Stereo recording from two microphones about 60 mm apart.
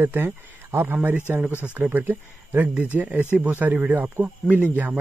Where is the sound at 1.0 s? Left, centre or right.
Right.